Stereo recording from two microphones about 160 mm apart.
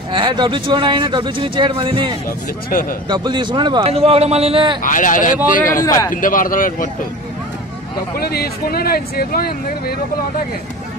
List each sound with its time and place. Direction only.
0.1 s speech: 30° right (ahead or behind)
2.2 s speech: 65° left (ahead or behind)
3.1 s speech: 30° right (ahead or behind)
4.8 s speech: 55° left (ahead or behind)
5.8 s speech: 20° left (ahead or behind)
6.2 s speech: 60° left (ahead or behind)
8.2 s speech: 75° left (ahead or behind)